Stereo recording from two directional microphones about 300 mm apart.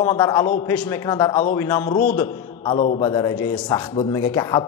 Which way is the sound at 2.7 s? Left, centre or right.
Left.